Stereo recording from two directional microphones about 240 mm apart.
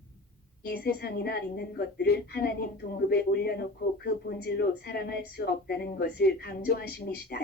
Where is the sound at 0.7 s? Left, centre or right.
Left.